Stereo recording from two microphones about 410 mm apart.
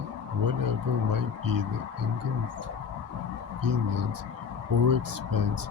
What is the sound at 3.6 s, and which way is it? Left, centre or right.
Speech, right.